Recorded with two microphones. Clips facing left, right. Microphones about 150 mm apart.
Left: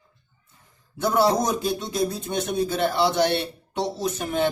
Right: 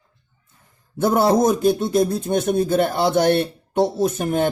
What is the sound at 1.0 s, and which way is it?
Speech, 50° right (ahead or behind).